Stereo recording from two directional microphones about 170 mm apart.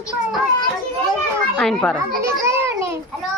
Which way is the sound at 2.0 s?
15° right (ahead or behind).